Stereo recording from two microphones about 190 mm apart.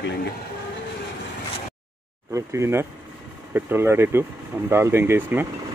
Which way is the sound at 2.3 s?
15° right (ahead or behind).